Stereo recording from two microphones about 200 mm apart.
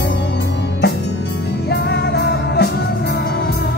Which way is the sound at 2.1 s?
55° left (ahead or behind).